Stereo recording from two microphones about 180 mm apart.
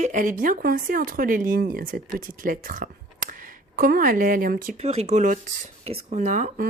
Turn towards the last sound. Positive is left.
turn(degrees=-45)  # may be behind; listen again after turning